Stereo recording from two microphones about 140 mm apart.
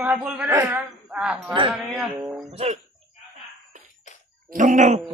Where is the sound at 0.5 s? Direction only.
20° right (ahead or behind).